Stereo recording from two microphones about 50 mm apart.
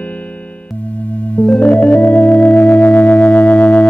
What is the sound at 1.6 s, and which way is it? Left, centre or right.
Organ, left.